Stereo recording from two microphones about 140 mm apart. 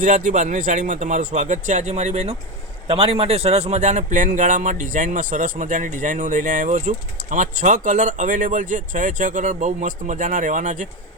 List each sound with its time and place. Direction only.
0.0 s speech: 65° right (ahead or behind)